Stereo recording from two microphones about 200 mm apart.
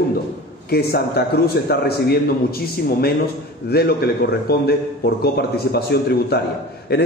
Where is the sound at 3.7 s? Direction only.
50° left (ahead or behind).